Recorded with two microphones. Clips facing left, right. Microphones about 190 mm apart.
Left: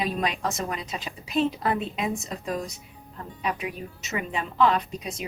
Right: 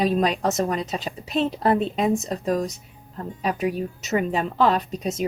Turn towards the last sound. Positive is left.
turn(degrees=-40)  # may be behind; listen again after turning